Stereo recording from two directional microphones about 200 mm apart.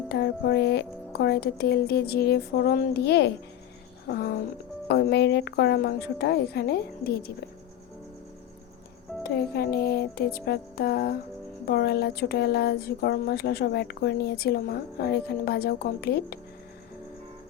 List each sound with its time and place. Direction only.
0.1 s speech: 55° left (ahead or behind)
9.2 s speech: 50° left (ahead or behind)